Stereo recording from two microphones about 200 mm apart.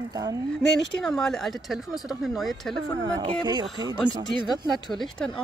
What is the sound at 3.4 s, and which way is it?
Speech, 20° right (ahead or behind).